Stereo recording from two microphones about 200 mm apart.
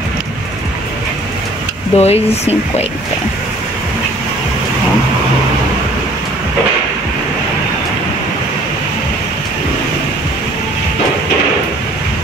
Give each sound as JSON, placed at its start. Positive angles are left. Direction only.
{"t": 2.0, "sound": "speech", "side_deg": 30}